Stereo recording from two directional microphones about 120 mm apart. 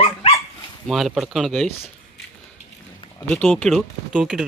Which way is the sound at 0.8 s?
Centre (ahead or behind).